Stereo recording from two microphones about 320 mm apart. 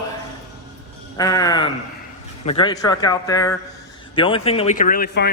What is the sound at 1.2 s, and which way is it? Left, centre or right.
A man's voice, centre.